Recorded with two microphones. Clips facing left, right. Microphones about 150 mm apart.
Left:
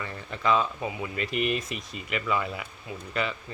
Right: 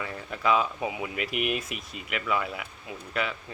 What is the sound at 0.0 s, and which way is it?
Speech, 5° right (ahead or behind).